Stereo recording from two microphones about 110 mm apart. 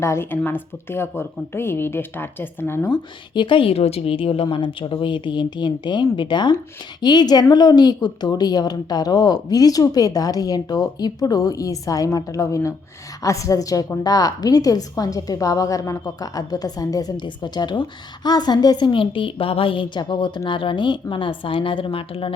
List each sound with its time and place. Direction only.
0.0 s a woman's voice: 25° left (ahead or behind)
2.9 s a woman's voice: 45° left (ahead or behind)